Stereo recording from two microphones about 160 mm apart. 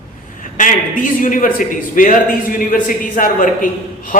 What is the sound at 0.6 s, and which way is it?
A man's voice, 55° left (ahead or behind).